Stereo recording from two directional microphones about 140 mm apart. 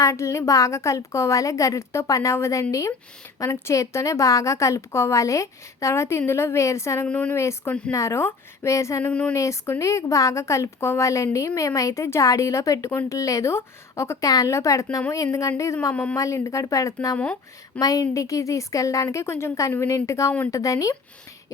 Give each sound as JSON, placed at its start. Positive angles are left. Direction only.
{"t": 0.0, "sound": "speech", "side_deg": 20}